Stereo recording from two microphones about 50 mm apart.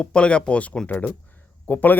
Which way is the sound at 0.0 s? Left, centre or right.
Centre.